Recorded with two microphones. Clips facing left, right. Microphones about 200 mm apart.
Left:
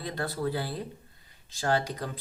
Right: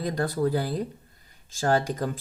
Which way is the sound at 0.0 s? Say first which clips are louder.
Right 6 dB; 45° right (ahead or behind).